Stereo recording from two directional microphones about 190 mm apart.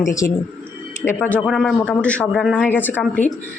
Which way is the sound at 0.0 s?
15° left (ahead or behind).